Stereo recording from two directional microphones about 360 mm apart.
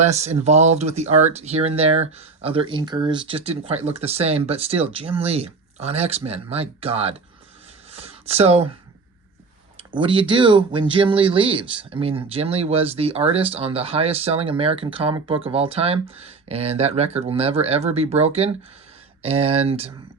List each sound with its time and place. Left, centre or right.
0.0 s speech: centre
7.9 s a sound: centre
9.9 s speech: centre